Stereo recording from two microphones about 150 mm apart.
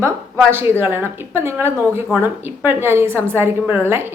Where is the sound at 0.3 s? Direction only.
15° right (ahead or behind).